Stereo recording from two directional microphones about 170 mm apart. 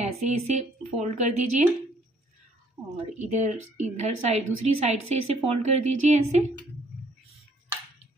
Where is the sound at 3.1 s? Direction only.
45° right (ahead or behind).